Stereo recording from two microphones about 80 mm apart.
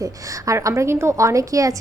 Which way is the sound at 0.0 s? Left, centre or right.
Right.